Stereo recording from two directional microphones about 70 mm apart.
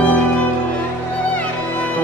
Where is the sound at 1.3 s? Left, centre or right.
Centre.